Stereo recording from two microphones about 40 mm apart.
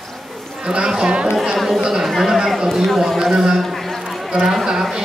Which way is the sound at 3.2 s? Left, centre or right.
Centre.